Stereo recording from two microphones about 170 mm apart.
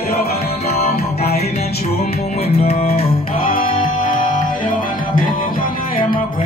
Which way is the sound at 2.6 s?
35° left (ahead or behind).